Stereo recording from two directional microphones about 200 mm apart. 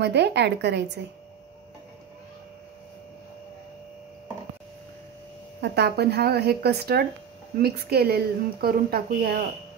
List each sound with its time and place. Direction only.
0.0 s a woman's voice: 55° right (ahead or behind)
5.6 s speech: 55° right (ahead or behind)